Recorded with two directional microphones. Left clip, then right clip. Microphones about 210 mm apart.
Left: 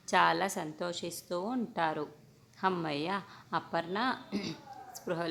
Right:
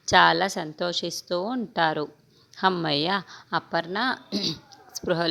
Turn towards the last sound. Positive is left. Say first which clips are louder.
# right 10 dB
turn(degrees=-35)  # may be behind; listen again after turning